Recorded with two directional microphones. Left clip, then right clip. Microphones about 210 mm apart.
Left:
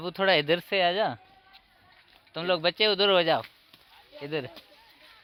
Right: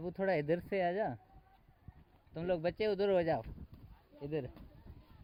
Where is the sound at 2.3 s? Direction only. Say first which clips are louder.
Left 10 dB; 10° left (ahead or behind).